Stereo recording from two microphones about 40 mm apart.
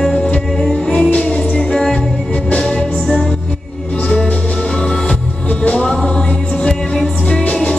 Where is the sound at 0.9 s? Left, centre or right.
Left.